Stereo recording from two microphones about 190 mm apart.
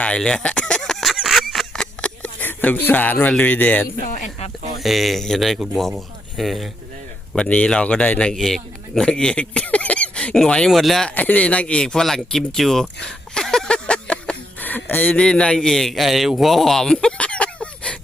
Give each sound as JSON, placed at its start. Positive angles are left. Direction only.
{"t": 0.0, "sound": "a sound", "side_deg": 5}
{"t": 4.0, "sound": "speech", "side_deg": 45}
{"t": 4.8, "sound": "a man's voice", "side_deg": 0}